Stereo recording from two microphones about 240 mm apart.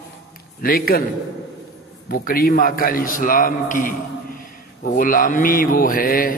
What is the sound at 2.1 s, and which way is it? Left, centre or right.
A man's voice, left.